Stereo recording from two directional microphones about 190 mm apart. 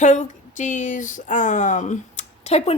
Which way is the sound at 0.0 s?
40° left (ahead or behind).